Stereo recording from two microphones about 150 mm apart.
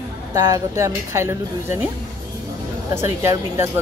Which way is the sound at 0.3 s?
25° right (ahead or behind).